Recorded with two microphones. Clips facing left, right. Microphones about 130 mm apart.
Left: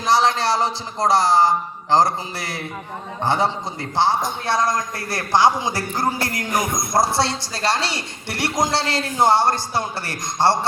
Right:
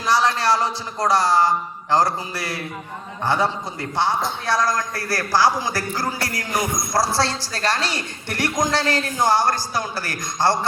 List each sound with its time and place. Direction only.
0.0 s a woman's voice: 25° left (ahead or behind)
6.5 s speech: 50° left (ahead or behind)
7.2 s a woman's voice: 20° left (ahead or behind)